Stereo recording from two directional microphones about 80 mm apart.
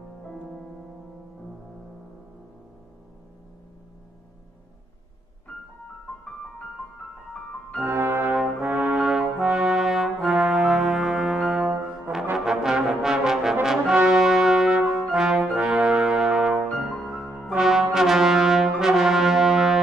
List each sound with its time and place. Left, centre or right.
5.5 s keyboard: centre
7.8 s brass instrument: right
8.3 s brass instrument: centre